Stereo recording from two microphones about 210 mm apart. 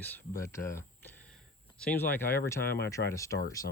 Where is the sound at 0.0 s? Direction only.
10° left (ahead or behind).